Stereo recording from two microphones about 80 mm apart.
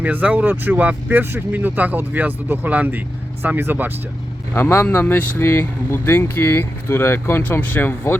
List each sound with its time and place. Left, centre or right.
0.0 s speech: centre
4.5 s speech: left